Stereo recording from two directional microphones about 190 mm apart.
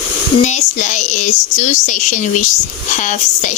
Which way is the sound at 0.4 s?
40° left (ahead or behind).